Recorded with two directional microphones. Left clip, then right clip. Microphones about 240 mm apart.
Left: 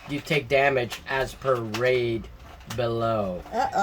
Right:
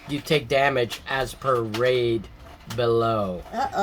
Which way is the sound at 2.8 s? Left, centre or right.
Centre.